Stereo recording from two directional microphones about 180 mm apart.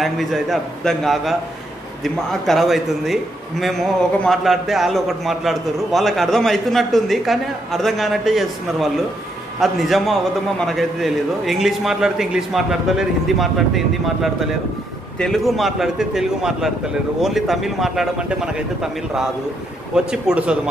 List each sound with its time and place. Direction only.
0.0 s a man's voice: centre (ahead or behind)
2.4 s a man's voice: centre (ahead or behind)